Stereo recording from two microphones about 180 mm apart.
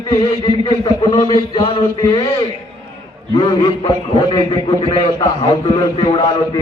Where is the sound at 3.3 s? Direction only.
25° left (ahead or behind).